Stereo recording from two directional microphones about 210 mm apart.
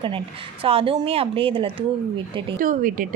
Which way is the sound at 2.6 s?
40° right (ahead or behind).